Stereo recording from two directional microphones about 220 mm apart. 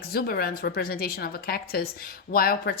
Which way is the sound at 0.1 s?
45° left (ahead or behind).